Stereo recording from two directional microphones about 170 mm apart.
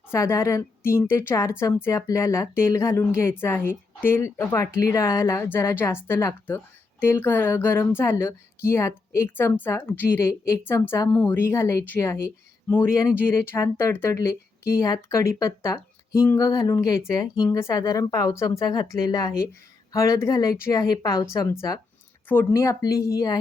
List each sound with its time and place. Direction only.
0.1 s speech: 15° left (ahead or behind)